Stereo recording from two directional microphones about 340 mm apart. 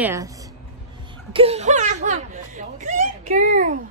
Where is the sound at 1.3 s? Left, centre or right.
Centre.